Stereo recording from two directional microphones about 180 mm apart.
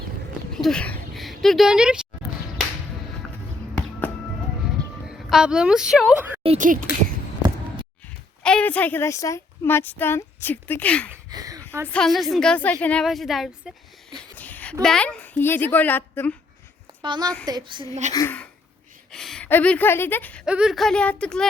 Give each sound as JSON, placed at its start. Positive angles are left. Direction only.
{"t": 0.5, "sound": "speech", "side_deg": 5}
{"t": 5.0, "sound": "speech", "side_deg": -5}
{"t": 6.4, "sound": "speech", "side_deg": -35}
{"t": 8.4, "sound": "a woman's voice", "side_deg": 5}
{"t": 11.1, "sound": "speech", "side_deg": -20}
{"t": 11.9, "sound": "a woman's voice", "side_deg": 5}
{"t": 17.0, "sound": "a woman's voice", "side_deg": -25}
{"t": 18.1, "sound": "speech", "side_deg": 20}
{"t": 19.1, "sound": "a woman's voice", "side_deg": 0}
{"t": 20.4, "sound": "a woman's voice", "side_deg": -5}